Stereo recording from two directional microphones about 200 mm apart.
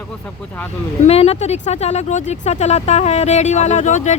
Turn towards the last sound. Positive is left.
turn(degrees=35)  # may be behind; listen again after turning